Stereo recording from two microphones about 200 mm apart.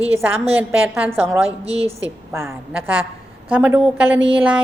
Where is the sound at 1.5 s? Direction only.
30° right (ahead or behind).